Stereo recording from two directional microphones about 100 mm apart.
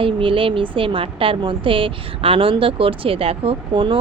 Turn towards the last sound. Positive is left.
turn(degrees=-55)  # may be behind; listen again after turning